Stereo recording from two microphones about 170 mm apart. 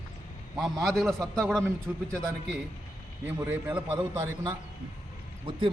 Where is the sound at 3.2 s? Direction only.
10° right (ahead or behind).